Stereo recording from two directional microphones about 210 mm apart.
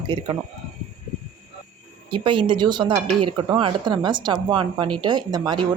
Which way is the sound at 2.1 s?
25° right (ahead or behind).